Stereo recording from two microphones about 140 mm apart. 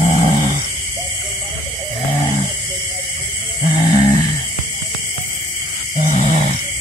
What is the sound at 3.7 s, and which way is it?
Snoring, 65° left (ahead or behind).